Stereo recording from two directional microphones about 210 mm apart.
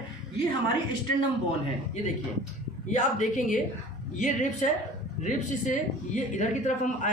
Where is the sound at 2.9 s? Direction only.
35° left (ahead or behind).